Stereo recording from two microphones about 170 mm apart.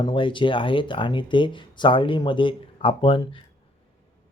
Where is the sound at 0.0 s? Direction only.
30° left (ahead or behind).